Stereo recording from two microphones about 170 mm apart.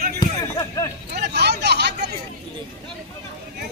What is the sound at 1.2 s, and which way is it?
Speech, 75° right (ahead or behind).